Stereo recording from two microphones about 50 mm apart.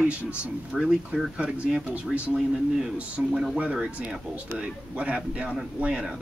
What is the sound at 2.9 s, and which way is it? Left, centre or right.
Speech, right.